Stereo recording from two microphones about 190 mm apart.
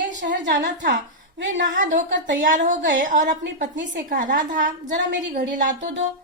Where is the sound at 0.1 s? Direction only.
40° right (ahead or behind).